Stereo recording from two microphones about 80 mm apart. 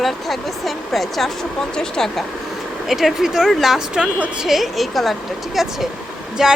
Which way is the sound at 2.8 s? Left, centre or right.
Centre.